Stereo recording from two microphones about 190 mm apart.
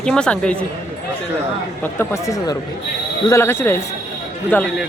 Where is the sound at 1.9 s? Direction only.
15° left (ahead or behind).